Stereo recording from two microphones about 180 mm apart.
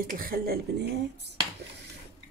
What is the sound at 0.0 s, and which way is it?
Speech, 50° right (ahead or behind).